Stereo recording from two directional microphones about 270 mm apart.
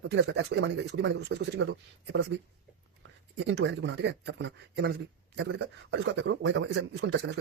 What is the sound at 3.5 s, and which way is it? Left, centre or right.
Speech, right.